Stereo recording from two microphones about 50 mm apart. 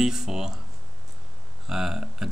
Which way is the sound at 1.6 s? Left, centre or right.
Centre.